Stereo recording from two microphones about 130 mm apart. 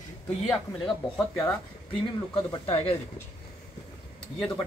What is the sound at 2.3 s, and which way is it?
Speech, 45° left (ahead or behind).